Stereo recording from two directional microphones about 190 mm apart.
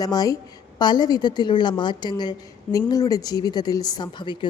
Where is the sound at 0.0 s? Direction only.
20° left (ahead or behind).